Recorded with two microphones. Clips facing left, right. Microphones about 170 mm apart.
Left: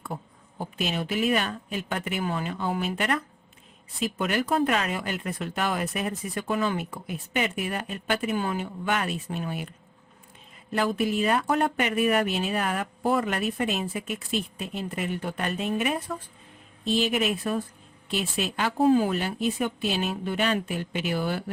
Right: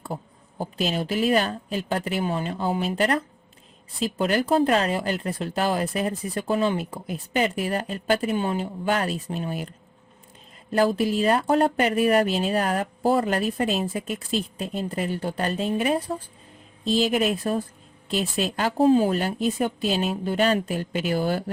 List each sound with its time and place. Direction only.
0.8 s speech: 35° right (ahead or behind)